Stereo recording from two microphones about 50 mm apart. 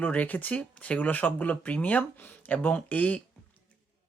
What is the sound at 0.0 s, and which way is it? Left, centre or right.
Speech, left.